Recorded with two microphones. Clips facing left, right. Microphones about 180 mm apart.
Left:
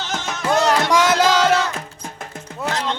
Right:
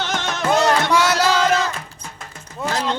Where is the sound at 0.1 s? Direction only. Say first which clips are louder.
Right 2 dB; 70° right (ahead or behind).